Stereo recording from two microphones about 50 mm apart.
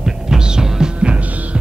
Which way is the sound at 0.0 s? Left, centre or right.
Centre.